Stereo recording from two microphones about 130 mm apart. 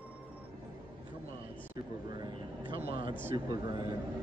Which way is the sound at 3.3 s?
35° right (ahead or behind).